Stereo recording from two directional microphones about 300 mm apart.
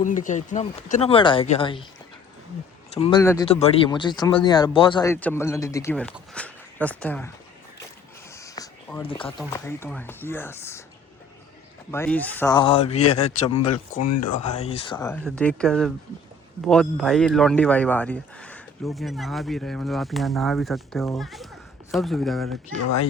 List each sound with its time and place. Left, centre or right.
0.0 s speech: left
2.9 s speech: centre
8.4 s a sound: centre
9.0 s speech: centre
11.9 s speech: centre
14.1 s speech: left
14.6 s speech: centre
22.8 s speech: left